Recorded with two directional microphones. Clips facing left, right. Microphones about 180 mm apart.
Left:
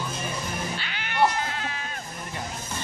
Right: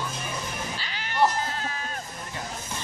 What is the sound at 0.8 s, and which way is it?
Cat, 35° right (ahead or behind).